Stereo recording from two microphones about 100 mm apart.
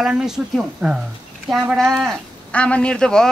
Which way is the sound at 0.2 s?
5° right (ahead or behind).